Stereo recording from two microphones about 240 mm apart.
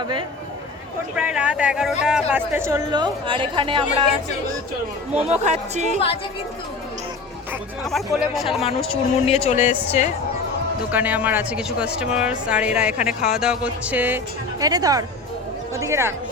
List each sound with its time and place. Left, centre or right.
0.0 s speech: centre
1.1 s speech: centre; by 3.8 s right
5.1 s speech: right
7.9 s speech: centre
8.9 s a woman's voice: left
10.9 s speech: centre